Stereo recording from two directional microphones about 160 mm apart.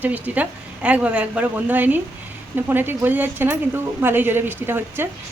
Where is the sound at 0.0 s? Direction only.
10° right (ahead or behind).